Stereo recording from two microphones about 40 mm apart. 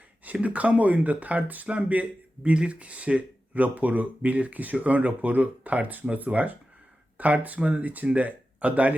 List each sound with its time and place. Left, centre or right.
0.4 s speech: right
1.6 s a man's voice: right